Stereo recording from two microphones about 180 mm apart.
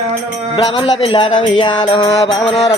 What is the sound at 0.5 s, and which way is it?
Music, 30° left (ahead or behind).